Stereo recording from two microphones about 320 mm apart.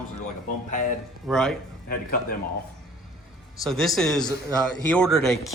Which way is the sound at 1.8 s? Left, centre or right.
Left.